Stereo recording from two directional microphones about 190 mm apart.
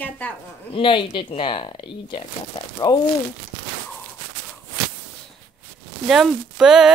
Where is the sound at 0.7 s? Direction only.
25° left (ahead or behind).